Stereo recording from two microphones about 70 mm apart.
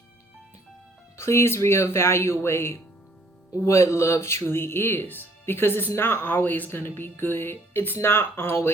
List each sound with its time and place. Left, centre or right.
1.1 s speech: left